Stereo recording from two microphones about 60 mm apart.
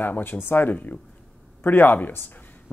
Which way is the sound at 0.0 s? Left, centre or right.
Left.